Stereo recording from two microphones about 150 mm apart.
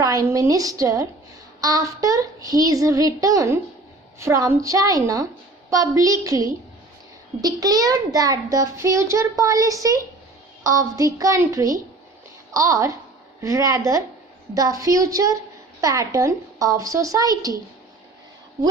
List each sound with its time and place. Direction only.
0.0 s a child's voice: 25° right (ahead or behind)